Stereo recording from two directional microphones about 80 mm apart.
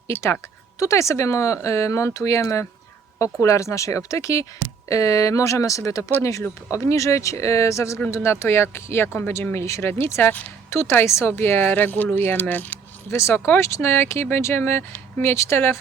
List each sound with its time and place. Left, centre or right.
0.8 s speech: left
13.1 s speech: left